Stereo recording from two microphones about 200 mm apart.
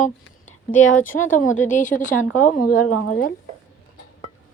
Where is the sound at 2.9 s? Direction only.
90° left.